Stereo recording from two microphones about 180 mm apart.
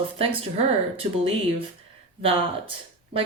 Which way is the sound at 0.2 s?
30° right (ahead or behind).